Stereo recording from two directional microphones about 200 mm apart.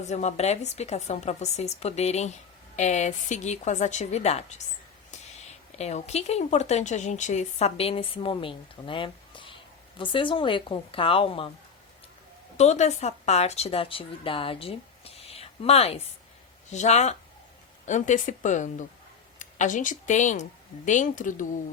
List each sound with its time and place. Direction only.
0.0 s speech: 35° left (ahead or behind)
5.7 s a woman's voice: 35° left (ahead or behind)
12.5 s speech: 35° left (ahead or behind)